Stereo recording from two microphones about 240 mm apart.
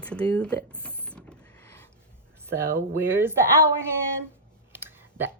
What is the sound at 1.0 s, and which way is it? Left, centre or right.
Mechanisms, centre.